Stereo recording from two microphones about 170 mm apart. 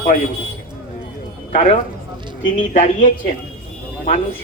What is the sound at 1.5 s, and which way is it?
A woman's voice, 50° left (ahead or behind).